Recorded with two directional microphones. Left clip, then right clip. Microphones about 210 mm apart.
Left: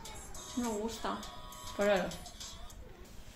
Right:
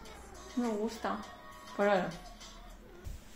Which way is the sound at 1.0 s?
10° right (ahead or behind).